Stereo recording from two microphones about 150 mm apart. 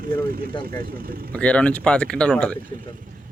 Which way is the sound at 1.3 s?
10° left (ahead or behind).